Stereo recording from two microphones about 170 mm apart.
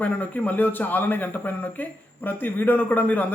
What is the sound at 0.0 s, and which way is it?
Speech, 10° left (ahead or behind).